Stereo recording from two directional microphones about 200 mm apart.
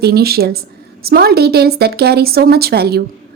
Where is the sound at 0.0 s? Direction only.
50° right (ahead or behind).